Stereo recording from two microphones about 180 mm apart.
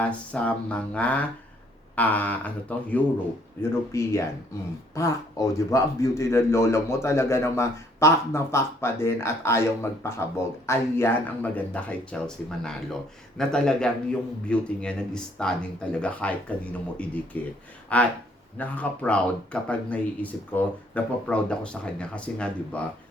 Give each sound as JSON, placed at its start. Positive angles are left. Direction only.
{"t": 0.0, "sound": "a man's voice", "side_deg": 5}